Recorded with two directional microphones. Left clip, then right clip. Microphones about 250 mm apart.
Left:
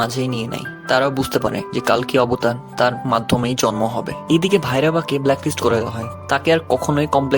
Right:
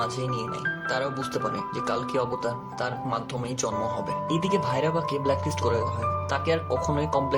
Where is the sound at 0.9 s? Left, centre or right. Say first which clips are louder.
Left 15 dB; left.